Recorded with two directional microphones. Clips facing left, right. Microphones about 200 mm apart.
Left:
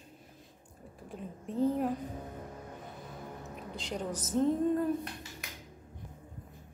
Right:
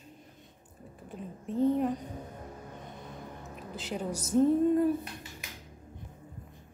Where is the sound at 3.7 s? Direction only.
5° right (ahead or behind).